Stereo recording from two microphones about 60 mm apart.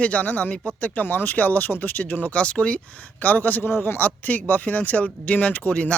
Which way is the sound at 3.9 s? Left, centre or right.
Left.